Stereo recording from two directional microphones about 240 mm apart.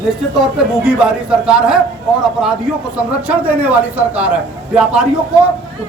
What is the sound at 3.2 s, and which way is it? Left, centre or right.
Speech, centre.